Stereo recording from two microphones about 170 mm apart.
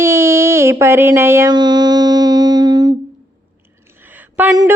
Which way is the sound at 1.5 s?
25° right (ahead or behind).